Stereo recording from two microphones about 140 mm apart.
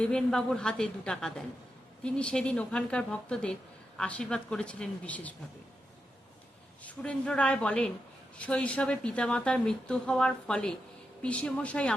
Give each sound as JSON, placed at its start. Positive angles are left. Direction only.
{"t": 0.0, "sound": "a woman's voice", "side_deg": 5}
{"t": 6.8, "sound": "speech", "side_deg": 10}